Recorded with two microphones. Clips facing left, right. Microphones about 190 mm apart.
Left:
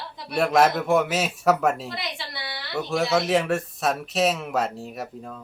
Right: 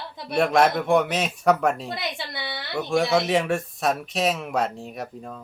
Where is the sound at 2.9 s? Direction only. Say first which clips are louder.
Right 1 dB; centre (ahead or behind).